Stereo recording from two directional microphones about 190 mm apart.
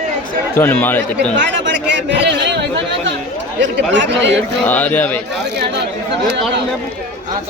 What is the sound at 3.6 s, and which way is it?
Speech, 70° right (ahead or behind).